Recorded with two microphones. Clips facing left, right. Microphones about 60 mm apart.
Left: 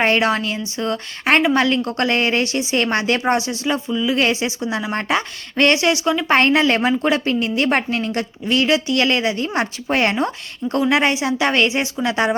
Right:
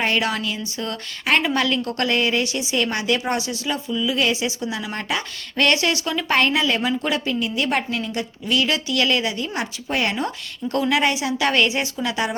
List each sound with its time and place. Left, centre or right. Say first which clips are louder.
0.0 s a woman's voice: left 5 dB; left
3.3 s a woman's voice: left 4 dB; left
4.1 s a woman's voice: left 3 dB; left
6.3 s a woman's voice: left 4 dB; left
8.4 s a woman's voice: left 4 dB; left